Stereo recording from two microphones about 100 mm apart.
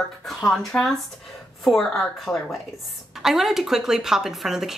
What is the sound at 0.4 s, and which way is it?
A woman's voice, 5° left (ahead or behind).